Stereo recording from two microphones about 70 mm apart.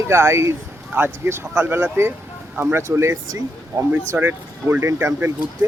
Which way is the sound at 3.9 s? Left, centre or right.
Right.